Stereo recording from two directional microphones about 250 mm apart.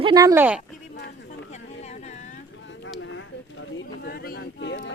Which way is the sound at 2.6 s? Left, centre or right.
Left.